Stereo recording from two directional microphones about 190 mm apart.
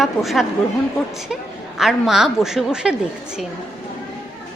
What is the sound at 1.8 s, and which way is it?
A woman's voice, centre (ahead or behind).